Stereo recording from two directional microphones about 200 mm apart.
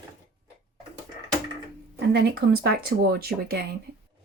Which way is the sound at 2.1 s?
55° right (ahead or behind).